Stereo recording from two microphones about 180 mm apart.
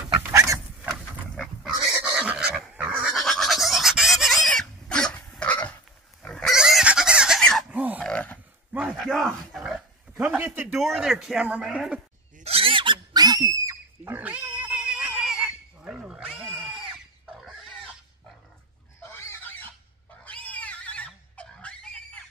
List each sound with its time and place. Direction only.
0.2 s dog: 15° right (ahead or behind)
1.2 s pig: 5° left (ahead or behind)
7.7 s a sound: 10° right (ahead or behind)
8.0 s grunt: 5° left (ahead or behind)
8.7 s a sound: centre (ahead or behind)
9.5 s dog: centre (ahead or behind)
10.2 s speech: 10° right (ahead or behind)
12.4 s pig: 35° right (ahead or behind); by 14.4 s 10° right (ahead or behind)
14.6 s a sound: 5° right (ahead or behind)
16.3 s pig: 10° right (ahead or behind)
19.1 s pig: 10° left (ahead or behind)
20.2 s a sound: 10° left (ahead or behind)